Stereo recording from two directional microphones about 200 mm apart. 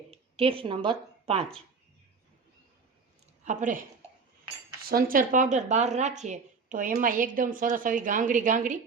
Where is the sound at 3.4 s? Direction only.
40° right (ahead or behind).